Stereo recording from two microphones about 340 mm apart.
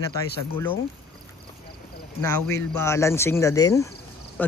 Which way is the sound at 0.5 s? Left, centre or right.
Centre.